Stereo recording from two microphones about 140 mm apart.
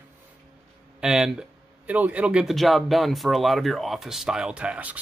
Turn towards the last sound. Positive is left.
turn(degrees=-10)  # may be behind; listen again after turning